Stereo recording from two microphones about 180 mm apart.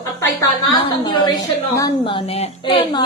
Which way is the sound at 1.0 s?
25° left (ahead or behind).